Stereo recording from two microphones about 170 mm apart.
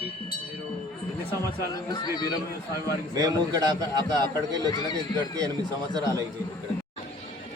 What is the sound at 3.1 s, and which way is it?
A man's voice, 20° right (ahead or behind).